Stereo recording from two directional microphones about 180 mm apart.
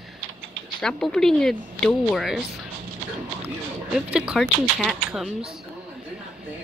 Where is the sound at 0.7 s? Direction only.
5° left (ahead or behind).